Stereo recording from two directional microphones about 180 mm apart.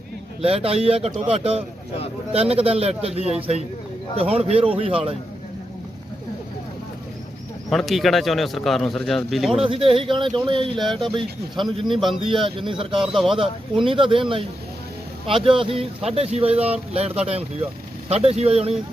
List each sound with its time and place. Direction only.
0.4 s speech: 30° right (ahead or behind)
7.7 s speech: centre (ahead or behind)
9.6 s speech: 30° right (ahead or behind)
13.1 s speech: centre (ahead or behind)
13.8 s speech: 30° right (ahead or behind)